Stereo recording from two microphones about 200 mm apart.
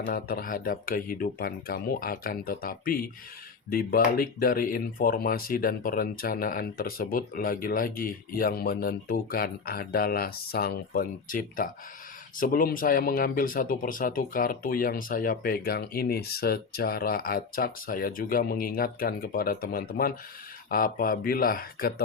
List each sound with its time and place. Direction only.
0.0 s speech: 45° left (ahead or behind)